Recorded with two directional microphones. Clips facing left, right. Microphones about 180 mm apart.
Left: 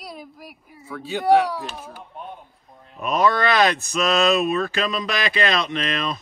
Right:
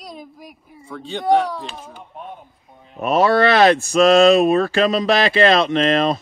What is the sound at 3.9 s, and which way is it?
Speech, 50° right (ahead or behind).